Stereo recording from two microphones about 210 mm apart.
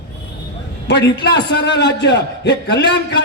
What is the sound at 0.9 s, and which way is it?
A man's voice, 55° left (ahead or behind).